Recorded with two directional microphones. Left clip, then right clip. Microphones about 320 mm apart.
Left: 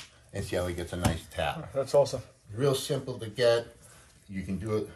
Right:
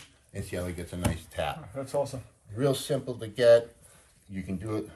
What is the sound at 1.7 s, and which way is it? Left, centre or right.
Speech, left.